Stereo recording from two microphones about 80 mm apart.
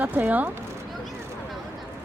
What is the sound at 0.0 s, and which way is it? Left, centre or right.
Speech, right.